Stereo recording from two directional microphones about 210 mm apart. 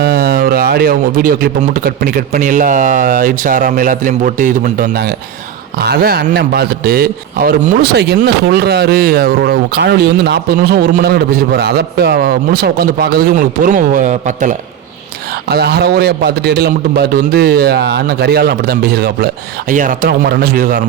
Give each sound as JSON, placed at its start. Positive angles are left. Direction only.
{"t": 0.0, "sound": "a man's voice", "side_deg": -50}
{"t": 15.4, "sound": "a man's voice", "side_deg": -50}